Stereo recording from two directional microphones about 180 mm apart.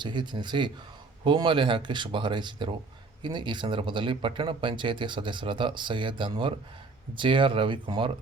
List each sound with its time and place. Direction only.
0.0 s speech: 25° right (ahead or behind)